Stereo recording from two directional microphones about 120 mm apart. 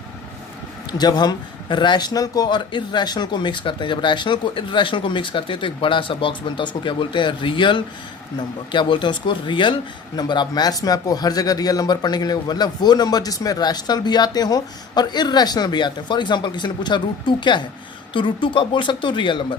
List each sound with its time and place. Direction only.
0.9 s speech: 35° left (ahead or behind)